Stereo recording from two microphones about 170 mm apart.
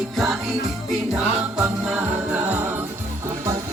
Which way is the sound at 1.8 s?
10° right (ahead or behind).